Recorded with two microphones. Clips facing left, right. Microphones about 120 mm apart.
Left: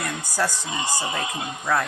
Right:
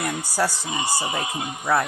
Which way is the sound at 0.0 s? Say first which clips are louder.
Right 2 dB; 15° right (ahead or behind).